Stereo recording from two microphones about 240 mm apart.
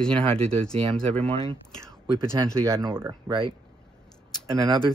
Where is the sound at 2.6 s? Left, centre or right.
Centre.